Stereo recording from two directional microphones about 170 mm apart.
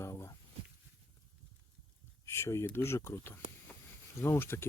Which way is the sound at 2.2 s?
15° left (ahead or behind).